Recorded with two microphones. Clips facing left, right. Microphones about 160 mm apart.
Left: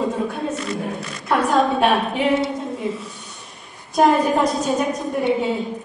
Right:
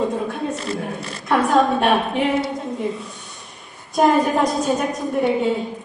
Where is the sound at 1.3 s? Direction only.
Centre (ahead or behind).